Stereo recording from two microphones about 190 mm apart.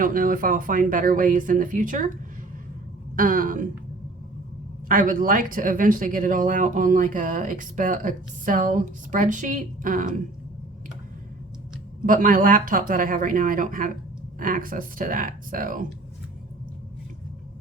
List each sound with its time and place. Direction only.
0.0 s speech: 45° right (ahead or behind)
3.2 s speech: 45° right (ahead or behind)
4.9 s speech: 45° right (ahead or behind)
12.0 s speech: 45° right (ahead or behind)